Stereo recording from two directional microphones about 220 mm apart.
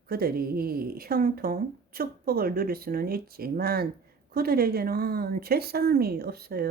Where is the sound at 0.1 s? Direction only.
45° right (ahead or behind).